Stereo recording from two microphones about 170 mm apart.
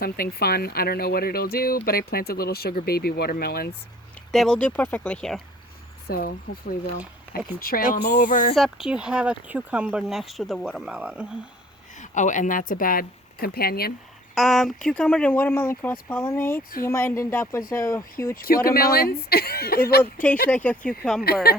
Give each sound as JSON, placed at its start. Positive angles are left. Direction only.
{"t": 0.0, "sound": "speech", "side_deg": 65}
{"t": 4.3, "sound": "speech", "side_deg": 5}
{"t": 6.1, "sound": "speech", "side_deg": 60}
{"t": 8.5, "sound": "speech", "side_deg": 0}
{"t": 11.9, "sound": "speech", "side_deg": 45}
{"t": 14.3, "sound": "speech", "side_deg": 0}
{"t": 18.3, "sound": "speech", "side_deg": 60}
{"t": 20.5, "sound": "speech", "side_deg": 10}